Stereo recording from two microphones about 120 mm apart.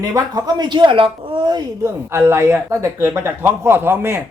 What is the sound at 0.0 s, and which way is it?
Speech, 30° right (ahead or behind).